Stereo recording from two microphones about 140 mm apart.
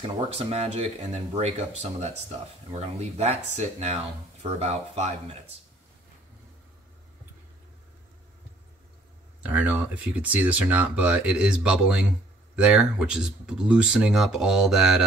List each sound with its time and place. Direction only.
0.0 s speech: 45° right (ahead or behind)
9.5 s speech: 10° right (ahead or behind)